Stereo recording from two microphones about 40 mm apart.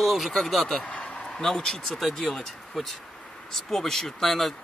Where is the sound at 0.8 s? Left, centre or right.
Left.